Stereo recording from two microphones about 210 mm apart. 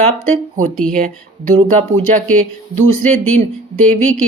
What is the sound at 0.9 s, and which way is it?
Speech, 40° right (ahead or behind).